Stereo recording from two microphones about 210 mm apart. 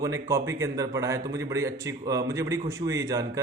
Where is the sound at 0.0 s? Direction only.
15° right (ahead or behind).